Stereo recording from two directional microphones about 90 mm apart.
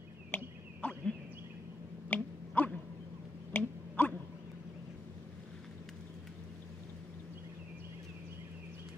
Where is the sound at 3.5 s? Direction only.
20° left (ahead or behind).